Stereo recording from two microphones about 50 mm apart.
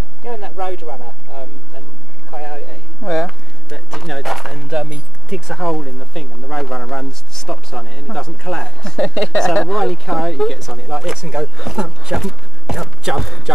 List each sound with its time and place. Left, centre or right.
0.2 s a sound: centre
3.9 s speech: centre
4.6 s speech: right
5.5 s speech: centre
6.1 s speech: centre
10.9 s speech: centre
13.0 s speech: centre